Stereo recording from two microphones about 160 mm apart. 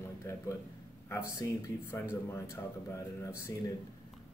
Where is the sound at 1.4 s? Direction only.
20° left (ahead or behind).